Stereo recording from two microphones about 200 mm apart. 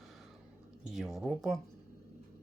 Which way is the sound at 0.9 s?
Centre (ahead or behind).